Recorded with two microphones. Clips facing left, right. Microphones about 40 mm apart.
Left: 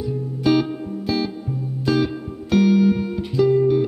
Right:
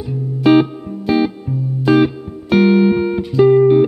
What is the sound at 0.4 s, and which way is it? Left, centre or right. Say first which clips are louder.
Music: right 7 dB; right.